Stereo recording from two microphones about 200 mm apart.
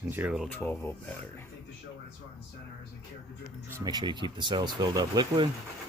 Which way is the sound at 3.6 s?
15° right (ahead or behind).